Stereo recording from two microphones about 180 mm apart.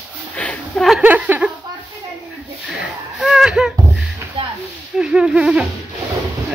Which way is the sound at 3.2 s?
5° right (ahead or behind).